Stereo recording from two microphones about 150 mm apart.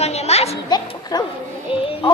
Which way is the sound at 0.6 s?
25° left (ahead or behind).